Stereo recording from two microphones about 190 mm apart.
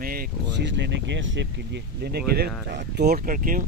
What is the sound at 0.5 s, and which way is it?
Speech, 65° right (ahead or behind).